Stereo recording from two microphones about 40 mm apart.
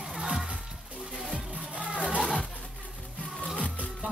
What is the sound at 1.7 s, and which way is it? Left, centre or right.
Music, right.